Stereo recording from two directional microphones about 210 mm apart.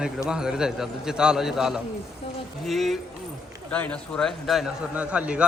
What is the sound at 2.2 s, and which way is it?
Speech, 25° left (ahead or behind).